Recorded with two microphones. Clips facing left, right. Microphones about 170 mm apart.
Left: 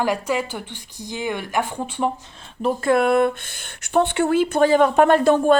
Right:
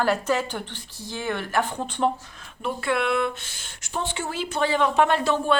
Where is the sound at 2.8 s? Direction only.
45° left (ahead or behind).